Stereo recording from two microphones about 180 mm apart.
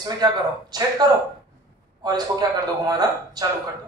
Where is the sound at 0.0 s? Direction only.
20° right (ahead or behind).